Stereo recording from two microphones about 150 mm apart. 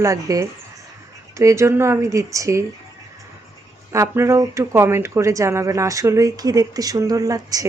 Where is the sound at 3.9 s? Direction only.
20° right (ahead or behind).